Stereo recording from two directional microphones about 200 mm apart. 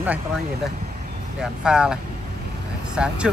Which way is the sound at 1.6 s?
5° right (ahead or behind).